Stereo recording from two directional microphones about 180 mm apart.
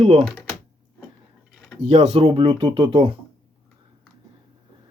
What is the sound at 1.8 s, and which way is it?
Speech, 35° right (ahead or behind).